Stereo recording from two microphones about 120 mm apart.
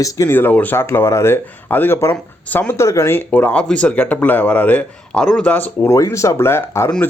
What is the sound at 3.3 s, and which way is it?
Speech, 15° left (ahead or behind).